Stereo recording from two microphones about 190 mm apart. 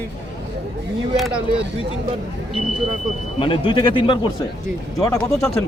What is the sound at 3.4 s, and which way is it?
Speech, 25° left (ahead or behind).